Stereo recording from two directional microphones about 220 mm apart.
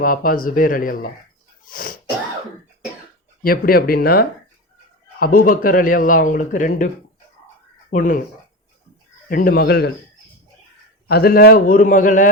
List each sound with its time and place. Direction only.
0.0 s a man's voice: 40° left (ahead or behind)
1.7 s a sound: 35° left (ahead or behind)
3.4 s a man's voice: 40° left (ahead or behind)
9.3 s speech: 45° left (ahead or behind)
11.1 s a man's voice: 45° left (ahead or behind)